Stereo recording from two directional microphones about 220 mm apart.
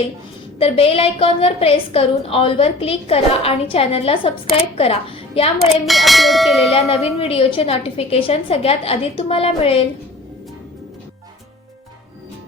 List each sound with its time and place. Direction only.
0.6 s a woman's voice: 25° left (ahead or behind)
5.8 s speech: centre (ahead or behind)
6.7 s a woman's voice: 25° left (ahead or behind)